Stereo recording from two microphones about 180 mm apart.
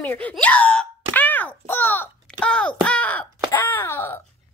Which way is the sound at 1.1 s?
10° left (ahead or behind).